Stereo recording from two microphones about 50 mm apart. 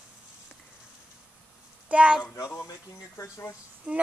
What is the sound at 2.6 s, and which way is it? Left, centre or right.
Speech, left.